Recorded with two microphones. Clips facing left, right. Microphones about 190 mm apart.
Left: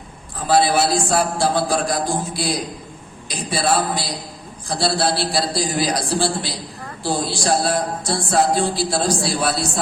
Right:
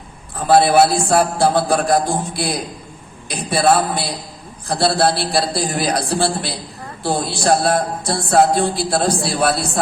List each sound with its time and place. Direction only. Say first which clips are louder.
0.4 s speech: right 5 dB; 55° right (ahead or behind)